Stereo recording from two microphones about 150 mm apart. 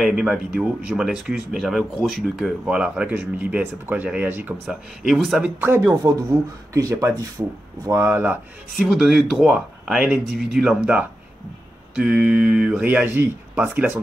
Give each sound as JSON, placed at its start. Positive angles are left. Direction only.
{"t": 0.0, "sound": "speech", "side_deg": -5}
{"t": 5.6, "sound": "speech", "side_deg": -20}
{"t": 8.7, "sound": "speech", "side_deg": 0}